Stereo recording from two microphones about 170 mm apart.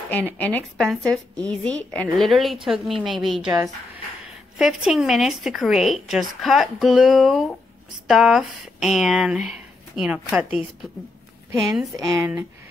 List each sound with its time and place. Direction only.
0.1 s a woman's voice: 10° left (ahead or behind)
4.6 s speech: 5° right (ahead or behind)
12.0 s speech: 15° right (ahead or behind)